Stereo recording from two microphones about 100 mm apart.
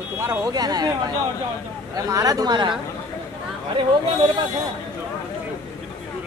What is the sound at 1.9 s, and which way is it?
Speech, 35° right (ahead or behind).